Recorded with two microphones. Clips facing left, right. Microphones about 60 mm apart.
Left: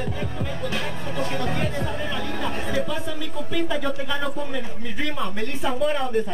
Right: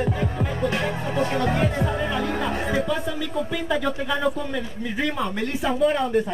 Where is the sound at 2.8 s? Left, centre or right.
Centre.